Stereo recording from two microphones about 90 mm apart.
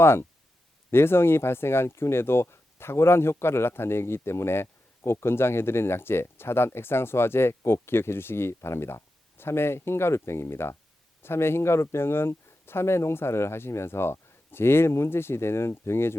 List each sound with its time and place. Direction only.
0.0 s speech: 30° left (ahead or behind)